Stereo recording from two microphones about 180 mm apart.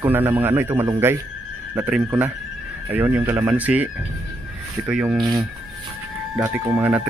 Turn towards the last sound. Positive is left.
turn(degrees=-10)  # may be behind; listen again after turning